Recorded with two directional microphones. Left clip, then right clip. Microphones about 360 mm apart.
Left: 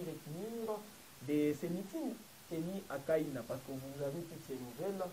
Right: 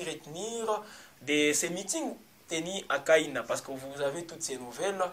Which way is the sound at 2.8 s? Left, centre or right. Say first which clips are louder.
Right 11 dB; centre.